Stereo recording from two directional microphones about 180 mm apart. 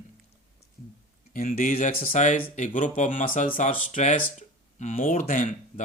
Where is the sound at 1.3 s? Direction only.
50° left (ahead or behind).